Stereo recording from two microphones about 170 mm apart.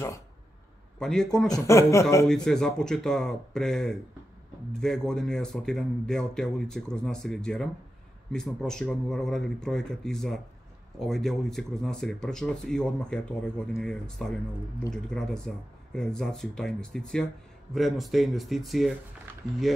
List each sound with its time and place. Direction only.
0.9 s speech: 5° left (ahead or behind)
1.5 s speech: 15° left (ahead or behind)
2.2 s speech: 5° left (ahead or behind)